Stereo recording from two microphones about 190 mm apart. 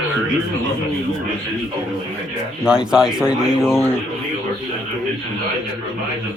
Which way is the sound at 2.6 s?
5° right (ahead or behind).